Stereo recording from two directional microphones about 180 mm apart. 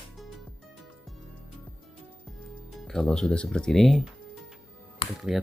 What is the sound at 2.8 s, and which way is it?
Speech, 5° left (ahead or behind).